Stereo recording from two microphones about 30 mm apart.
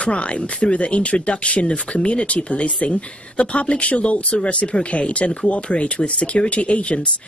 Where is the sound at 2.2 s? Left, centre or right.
Left.